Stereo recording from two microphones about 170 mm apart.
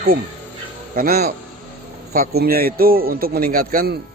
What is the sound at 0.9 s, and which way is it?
Speech, 65° right (ahead or behind).